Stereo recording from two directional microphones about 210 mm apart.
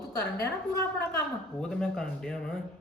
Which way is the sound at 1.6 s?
Centre (ahead or behind).